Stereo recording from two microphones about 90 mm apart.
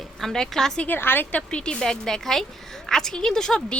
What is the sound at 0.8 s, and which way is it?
Speech, 25° left (ahead or behind).